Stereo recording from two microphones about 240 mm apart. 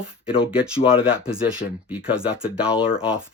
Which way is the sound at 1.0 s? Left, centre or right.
Centre.